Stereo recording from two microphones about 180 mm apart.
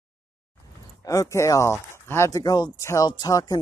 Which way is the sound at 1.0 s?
20° left (ahead or behind).